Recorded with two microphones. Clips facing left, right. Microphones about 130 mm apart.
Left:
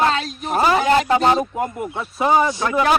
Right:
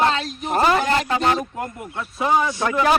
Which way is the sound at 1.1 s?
30° left (ahead or behind).